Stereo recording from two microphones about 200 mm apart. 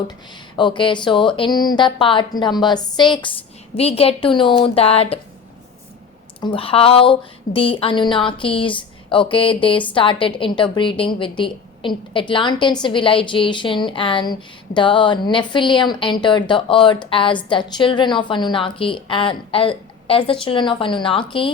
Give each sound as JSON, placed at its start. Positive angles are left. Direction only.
{"t": 0.5, "sound": "a woman's voice", "side_deg": 25}
{"t": 6.4, "sound": "a woman's voice", "side_deg": 25}